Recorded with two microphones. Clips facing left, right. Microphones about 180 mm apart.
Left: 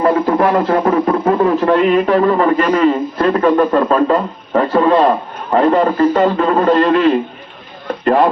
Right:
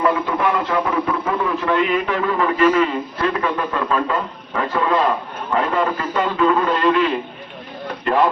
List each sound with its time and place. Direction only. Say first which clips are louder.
0.0 s a man's voice: left 6 dB; 40° left (ahead or behind)